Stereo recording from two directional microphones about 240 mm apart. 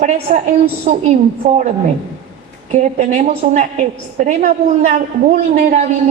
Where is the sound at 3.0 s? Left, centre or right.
Right.